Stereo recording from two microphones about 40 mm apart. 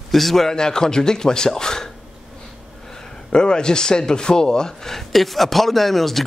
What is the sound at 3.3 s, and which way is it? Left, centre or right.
Speech, left.